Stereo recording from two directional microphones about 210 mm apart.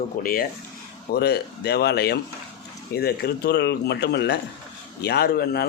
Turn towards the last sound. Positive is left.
turn(degrees=50)  # may be behind; listen again after turning